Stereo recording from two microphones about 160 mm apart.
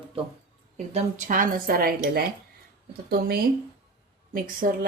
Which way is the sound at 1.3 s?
60° right (ahead or behind).